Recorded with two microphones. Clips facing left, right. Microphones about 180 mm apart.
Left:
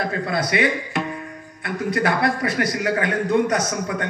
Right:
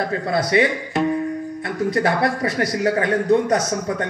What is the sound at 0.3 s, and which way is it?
A man's voice, 35° right (ahead or behind).